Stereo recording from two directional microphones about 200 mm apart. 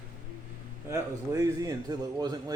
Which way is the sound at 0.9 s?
15° right (ahead or behind).